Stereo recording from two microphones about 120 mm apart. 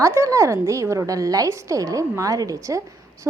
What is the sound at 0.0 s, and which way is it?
A woman's voice, 25° right (ahead or behind).